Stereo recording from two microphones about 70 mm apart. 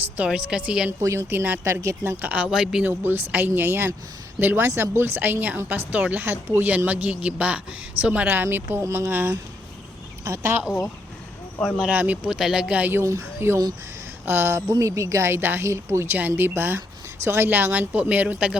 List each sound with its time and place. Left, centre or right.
0.3 s speech: centre
0.9 s speech: right
1.3 s speech: right
1.6 s speech: right
2.5 s speech: centre
2.8 s speech: right
8.3 s speech: right
10.2 s speech: right
11.8 s speech: right
12.4 s speech: centre
12.9 s speech: right
14.7 s speech: right; by 18.5 s centre